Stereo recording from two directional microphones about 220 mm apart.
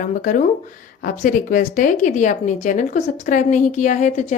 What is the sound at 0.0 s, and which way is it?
Speech, 35° left (ahead or behind).